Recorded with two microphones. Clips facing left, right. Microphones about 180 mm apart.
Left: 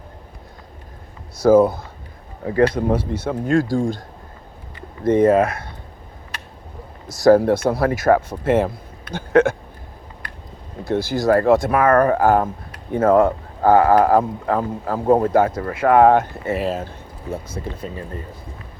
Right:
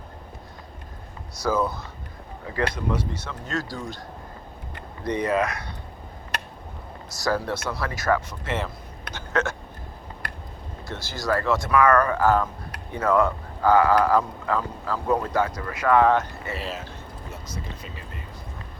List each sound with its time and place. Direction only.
1.4 s speech: 50° left (ahead or behind)
5.0 s speech: 50° left (ahead or behind)
7.1 s speech: 50° left (ahead or behind)
10.8 s speech: 55° left (ahead or behind)